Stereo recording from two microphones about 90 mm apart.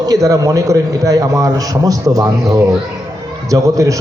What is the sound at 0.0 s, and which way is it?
A man's voice, 40° right (ahead or behind).